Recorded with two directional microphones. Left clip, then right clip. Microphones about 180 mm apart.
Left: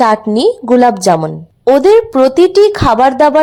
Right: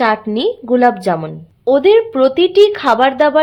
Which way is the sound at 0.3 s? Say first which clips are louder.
Left 5 dB; 30° left (ahead or behind).